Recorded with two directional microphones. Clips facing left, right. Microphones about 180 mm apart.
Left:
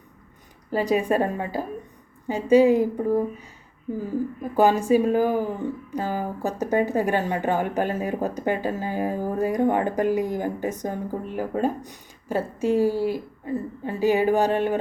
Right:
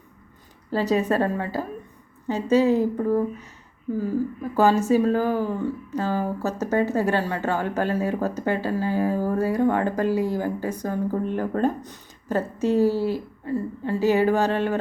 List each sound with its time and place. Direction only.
0.7 s speech: 15° left (ahead or behind)
4.5 s speech: 15° left (ahead or behind)
11.3 s speech: 10° left (ahead or behind)